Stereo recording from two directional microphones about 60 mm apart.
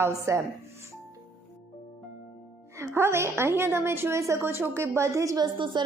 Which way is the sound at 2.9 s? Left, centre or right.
Right.